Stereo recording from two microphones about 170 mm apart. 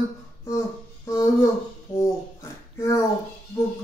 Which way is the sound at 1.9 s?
15° left (ahead or behind).